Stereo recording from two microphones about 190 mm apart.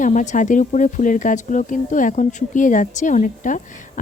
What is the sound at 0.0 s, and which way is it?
Speech, 40° left (ahead or behind).